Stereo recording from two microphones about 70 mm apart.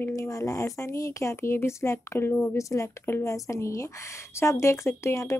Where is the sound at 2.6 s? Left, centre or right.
Left.